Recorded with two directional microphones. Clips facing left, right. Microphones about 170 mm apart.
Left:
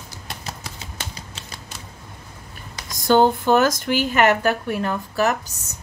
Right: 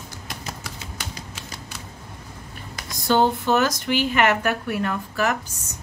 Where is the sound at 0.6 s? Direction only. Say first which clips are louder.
Even; 30° left (ahead or behind).